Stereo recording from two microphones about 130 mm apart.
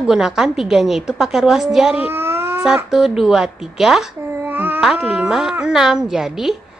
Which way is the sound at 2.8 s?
5° right (ahead or behind).